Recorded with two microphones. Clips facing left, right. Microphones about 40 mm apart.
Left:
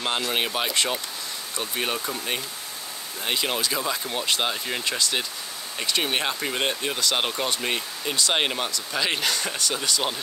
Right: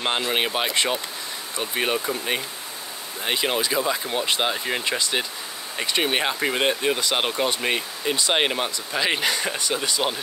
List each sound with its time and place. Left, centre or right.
0.0 s speech: centre